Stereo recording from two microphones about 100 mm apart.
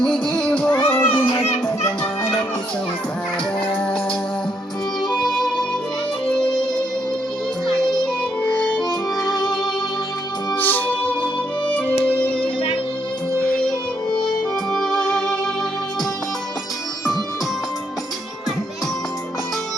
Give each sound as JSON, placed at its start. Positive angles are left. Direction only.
{"t": 0.0, "sound": "music", "side_deg": 5}
{"t": 3.8, "sound": "music", "side_deg": 10}
{"t": 5.1, "sound": "music", "side_deg": 5}
{"t": 8.4, "sound": "music", "side_deg": 10}
{"t": 10.5, "sound": "music", "side_deg": 20}